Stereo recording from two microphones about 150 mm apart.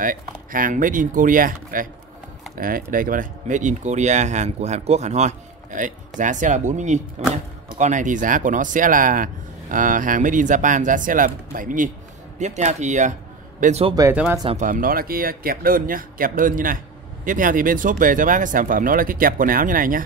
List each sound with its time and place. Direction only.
0.0 s speech: 65° right (ahead or behind)
12.4 s speech: 50° right (ahead or behind)
14.7 s speech: 70° right (ahead or behind)